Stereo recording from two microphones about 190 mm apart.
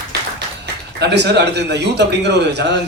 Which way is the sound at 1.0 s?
65° right (ahead or behind).